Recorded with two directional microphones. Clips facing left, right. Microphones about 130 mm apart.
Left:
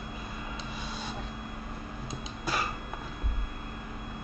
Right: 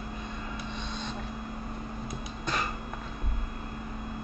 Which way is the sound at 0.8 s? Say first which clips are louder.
Right 1 dB; 5° left (ahead or behind).